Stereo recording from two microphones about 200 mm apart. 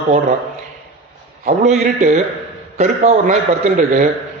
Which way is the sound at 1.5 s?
35° right (ahead or behind).